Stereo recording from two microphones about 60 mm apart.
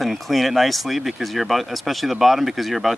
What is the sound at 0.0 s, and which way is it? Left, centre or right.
Speech, centre.